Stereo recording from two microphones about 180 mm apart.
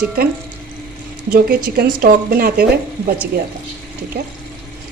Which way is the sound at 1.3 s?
55° right (ahead or behind).